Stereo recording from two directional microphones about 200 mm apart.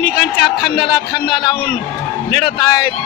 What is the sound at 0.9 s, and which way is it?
Speech, 20° left (ahead or behind).